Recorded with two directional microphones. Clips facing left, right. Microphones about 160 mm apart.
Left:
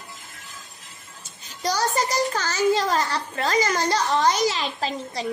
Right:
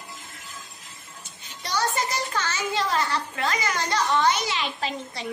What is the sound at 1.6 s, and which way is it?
A child's voice, 35° left (ahead or behind).